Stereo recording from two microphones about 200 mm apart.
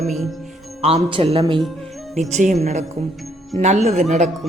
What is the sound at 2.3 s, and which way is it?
Speech, 35° right (ahead or behind).